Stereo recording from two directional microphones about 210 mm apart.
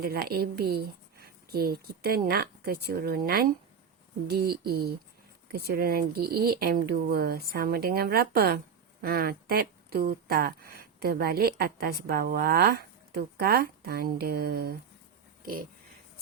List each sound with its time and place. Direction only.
0.0 s speech: 45° right (ahead or behind)